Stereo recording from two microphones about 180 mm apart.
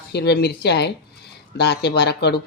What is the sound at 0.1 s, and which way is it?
A woman's voice, 65° left (ahead or behind).